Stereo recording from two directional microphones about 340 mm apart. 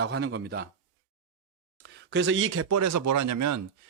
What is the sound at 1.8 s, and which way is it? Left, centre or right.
Speech, right.